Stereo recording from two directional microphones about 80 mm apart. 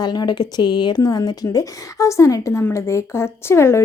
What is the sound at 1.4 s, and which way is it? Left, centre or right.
A woman's voice, left.